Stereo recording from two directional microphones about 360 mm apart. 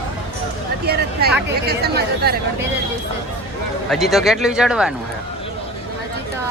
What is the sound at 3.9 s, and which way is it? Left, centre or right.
Speech, centre.